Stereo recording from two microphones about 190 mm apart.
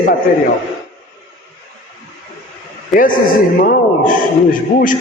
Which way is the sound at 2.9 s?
45° left (ahead or behind).